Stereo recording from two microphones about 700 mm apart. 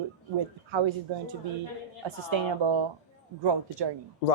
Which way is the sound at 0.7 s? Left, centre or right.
Right.